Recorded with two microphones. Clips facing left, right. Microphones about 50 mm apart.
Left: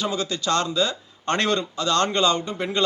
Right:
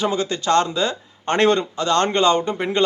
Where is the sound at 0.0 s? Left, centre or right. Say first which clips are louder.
Right 4 dB; right.